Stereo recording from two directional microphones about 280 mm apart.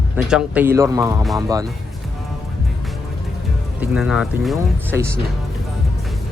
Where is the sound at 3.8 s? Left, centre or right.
Centre.